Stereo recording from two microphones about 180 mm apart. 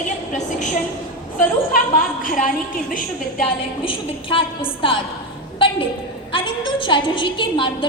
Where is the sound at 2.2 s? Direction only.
50° left (ahead or behind).